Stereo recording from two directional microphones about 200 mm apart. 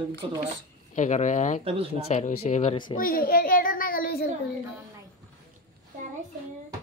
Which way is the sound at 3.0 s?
45° left (ahead or behind).